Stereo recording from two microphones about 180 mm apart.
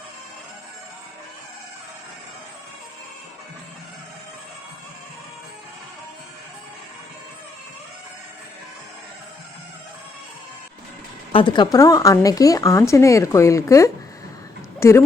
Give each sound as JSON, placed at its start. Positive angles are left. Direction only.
{"t": 11.3, "sound": "a woman's voice", "side_deg": 30}